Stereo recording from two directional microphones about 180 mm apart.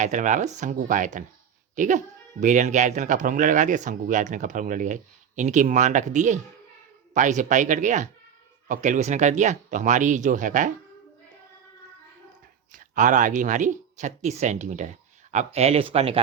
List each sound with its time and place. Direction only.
0.0 s speech: 45° right (ahead or behind)
12.7 s speech: 45° right (ahead or behind)